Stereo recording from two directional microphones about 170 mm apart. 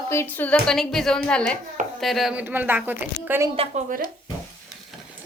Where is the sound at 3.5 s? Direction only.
35° right (ahead or behind).